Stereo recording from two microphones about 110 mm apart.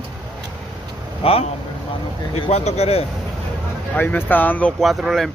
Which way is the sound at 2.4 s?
75° left (ahead or behind).